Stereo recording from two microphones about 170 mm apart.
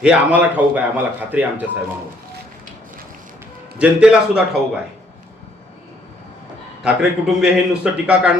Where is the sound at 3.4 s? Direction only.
5° right (ahead or behind).